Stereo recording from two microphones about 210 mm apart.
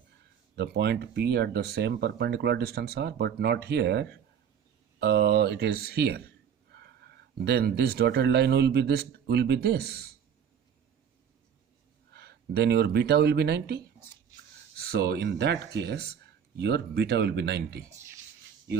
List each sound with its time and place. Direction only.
0.5 s speech: 50° right (ahead or behind)
6.7 s a sound: 50° right (ahead or behind)
7.3 s speech: 50° right (ahead or behind)
12.1 s speech: 50° right (ahead or behind)